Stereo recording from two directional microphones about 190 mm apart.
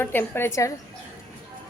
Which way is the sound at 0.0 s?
10° left (ahead or behind).